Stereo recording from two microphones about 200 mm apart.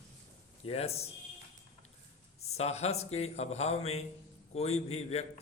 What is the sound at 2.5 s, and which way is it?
A man's voice, 30° left (ahead or behind).